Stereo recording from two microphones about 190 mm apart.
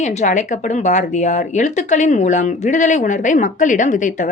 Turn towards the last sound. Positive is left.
turn(degrees=40)  # may be behind; listen again after turning